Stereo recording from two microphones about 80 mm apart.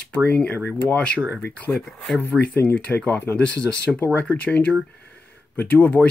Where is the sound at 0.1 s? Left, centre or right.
Centre.